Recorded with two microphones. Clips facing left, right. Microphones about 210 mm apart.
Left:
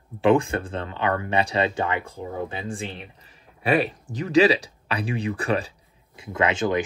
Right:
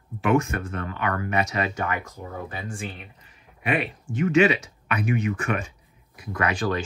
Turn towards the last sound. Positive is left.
turn(degrees=20)  # may be behind; listen again after turning